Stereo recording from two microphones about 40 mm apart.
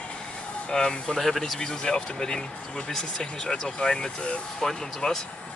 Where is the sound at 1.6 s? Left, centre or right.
Centre.